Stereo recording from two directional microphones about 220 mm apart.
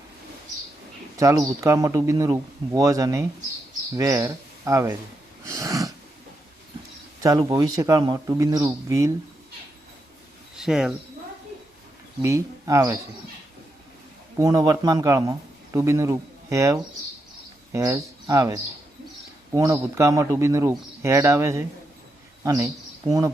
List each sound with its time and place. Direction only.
1.1 s speech: 15° right (ahead or behind)
5.5 s snort: 15° right (ahead or behind)
7.2 s speech: 15° right (ahead or behind)
10.6 s speech: centre (ahead or behind)
12.2 s speech: 15° right (ahead or behind)
14.3 s speech: 15° right (ahead or behind)